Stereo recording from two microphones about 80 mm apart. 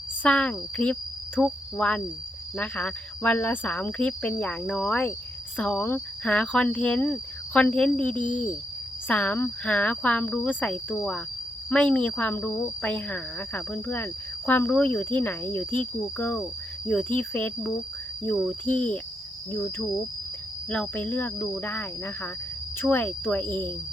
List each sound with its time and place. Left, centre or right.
0.2 s speech: centre
1.4 s cricket: centre
2.6 s speech: centre